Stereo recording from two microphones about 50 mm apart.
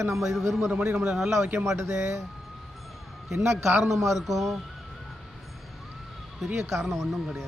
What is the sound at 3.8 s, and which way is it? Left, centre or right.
Speech, centre.